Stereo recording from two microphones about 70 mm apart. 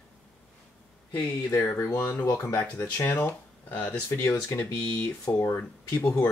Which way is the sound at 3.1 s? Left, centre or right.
Left.